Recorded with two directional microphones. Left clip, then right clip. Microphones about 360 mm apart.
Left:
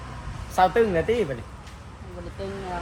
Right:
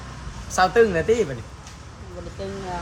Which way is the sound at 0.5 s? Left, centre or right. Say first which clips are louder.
Right 2 dB; right.